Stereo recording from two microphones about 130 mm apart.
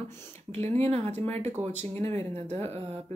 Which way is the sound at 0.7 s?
55° right (ahead or behind).